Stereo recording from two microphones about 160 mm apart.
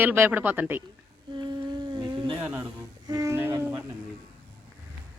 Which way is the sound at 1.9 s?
30° right (ahead or behind).